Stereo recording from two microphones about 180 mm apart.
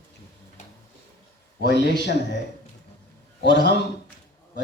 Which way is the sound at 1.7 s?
75° left (ahead or behind).